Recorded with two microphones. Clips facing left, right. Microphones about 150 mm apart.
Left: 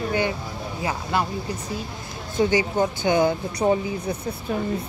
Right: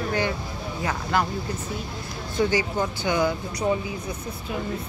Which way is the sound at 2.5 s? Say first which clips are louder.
Left 3 dB; 20° left (ahead or behind).